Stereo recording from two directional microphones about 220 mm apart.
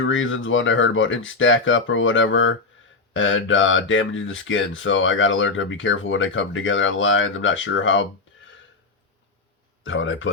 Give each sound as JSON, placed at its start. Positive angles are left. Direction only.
{"t": 0.0, "sound": "speech", "side_deg": 60}
{"t": 9.8, "sound": "speech", "side_deg": 60}